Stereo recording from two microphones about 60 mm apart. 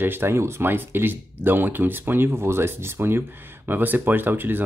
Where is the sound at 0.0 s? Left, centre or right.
Right.